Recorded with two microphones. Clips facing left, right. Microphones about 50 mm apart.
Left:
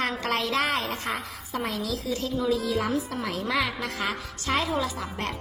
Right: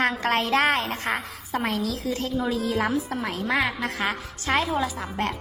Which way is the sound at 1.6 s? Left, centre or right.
Right.